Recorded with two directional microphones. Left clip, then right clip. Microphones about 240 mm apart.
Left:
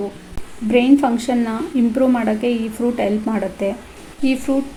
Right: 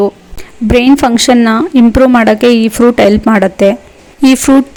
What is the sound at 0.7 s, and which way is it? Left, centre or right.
Speech, right.